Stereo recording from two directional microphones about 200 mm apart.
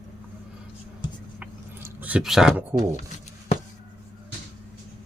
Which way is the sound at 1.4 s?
10° right (ahead or behind).